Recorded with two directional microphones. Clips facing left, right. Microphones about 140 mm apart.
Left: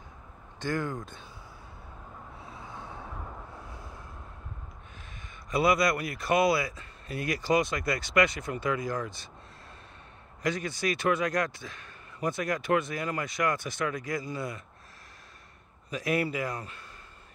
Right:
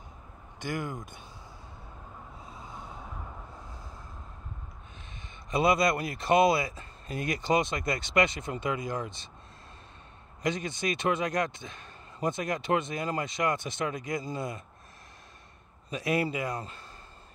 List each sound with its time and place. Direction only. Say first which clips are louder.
0.6 s speech: left 3 dB; 15° right (ahead or behind)
2.6 s vehicle: left 1 dB; 20° right (ahead or behind)
3.1 s a sound: left 2 dB; 10° left (ahead or behind)
5.5 s speech: even; 25° right (ahead or behind)
10.4 s speech: left 1 dB; 20° right (ahead or behind)
15.9 s speech: even; 25° right (ahead or behind)